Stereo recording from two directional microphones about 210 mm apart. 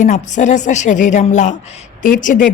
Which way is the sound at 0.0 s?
35° left (ahead or behind).